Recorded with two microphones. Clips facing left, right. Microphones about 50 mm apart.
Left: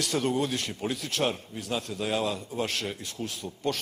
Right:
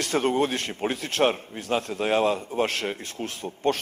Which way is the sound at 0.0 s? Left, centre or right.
Right.